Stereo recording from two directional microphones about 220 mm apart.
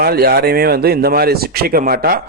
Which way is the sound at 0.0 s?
45° right (ahead or behind).